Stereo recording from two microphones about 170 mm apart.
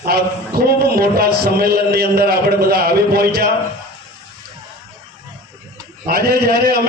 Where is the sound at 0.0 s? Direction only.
65° right (ahead or behind).